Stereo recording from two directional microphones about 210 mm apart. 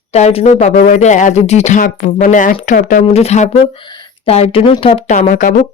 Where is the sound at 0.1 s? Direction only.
30° left (ahead or behind).